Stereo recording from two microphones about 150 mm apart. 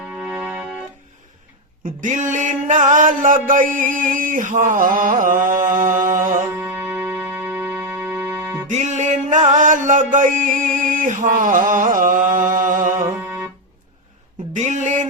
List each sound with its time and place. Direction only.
0.0 s music: 5° right (ahead or behind)
1.8 s mantra: 60° right (ahead or behind)
6.3 s music: 15° right (ahead or behind)
8.7 s music: 55° right (ahead or behind)
13.1 s music: 15° right (ahead or behind)
14.5 s a sound: 50° right (ahead or behind)